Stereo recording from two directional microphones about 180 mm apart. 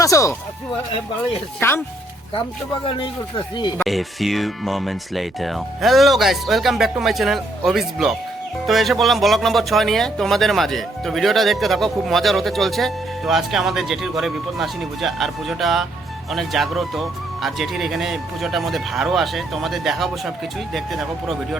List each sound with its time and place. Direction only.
0.0 s speech: 15° left (ahead or behind)
1.5 s speech: 15° left (ahead or behind)
2.8 s speech: 30° left (ahead or behind)
3.8 s speech: centre (ahead or behind)